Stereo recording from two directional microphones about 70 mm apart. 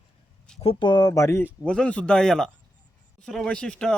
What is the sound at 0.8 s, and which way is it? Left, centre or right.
Speech, left.